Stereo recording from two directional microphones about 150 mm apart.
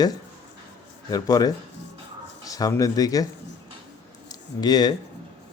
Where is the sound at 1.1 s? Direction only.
25° left (ahead or behind).